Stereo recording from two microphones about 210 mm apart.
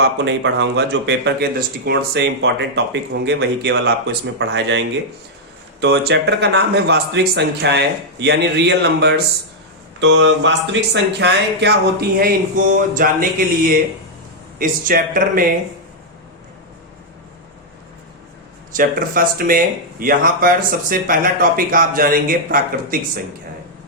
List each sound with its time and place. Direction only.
0.0 s speech: 55° right (ahead or behind)
5.8 s speech: 50° right (ahead or behind)
12.6 s a sound: 40° right (ahead or behind)
14.6 s speech: 40° right (ahead or behind)
18.7 s speech: 40° right (ahead or behind)